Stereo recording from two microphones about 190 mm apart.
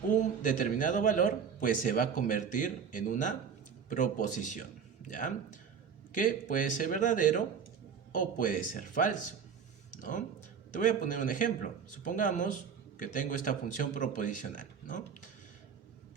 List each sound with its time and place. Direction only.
0.1 s a man's voice: 45° left (ahead or behind)